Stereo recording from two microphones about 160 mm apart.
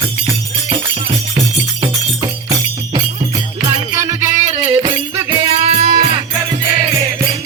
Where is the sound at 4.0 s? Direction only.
20° right (ahead or behind).